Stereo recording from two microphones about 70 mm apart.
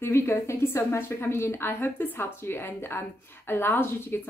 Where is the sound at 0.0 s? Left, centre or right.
Left.